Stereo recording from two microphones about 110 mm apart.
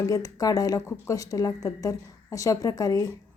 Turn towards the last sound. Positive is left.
turn(degrees=35)  # may be behind; listen again after turning